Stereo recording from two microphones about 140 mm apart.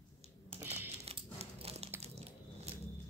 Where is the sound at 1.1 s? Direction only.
45° right (ahead or behind).